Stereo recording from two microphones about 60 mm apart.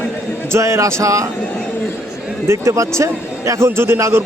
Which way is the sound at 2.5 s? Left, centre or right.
Right.